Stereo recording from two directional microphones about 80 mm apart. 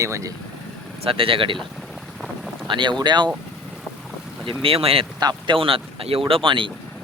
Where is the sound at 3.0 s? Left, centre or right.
Right.